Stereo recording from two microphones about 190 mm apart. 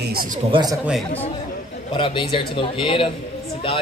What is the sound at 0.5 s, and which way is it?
Speech, 25° right (ahead or behind).